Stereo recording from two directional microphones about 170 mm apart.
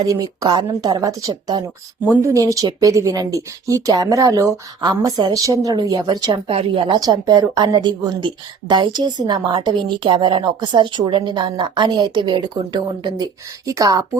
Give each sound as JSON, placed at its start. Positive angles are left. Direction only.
{"t": 0.0, "sound": "speech", "side_deg": -20}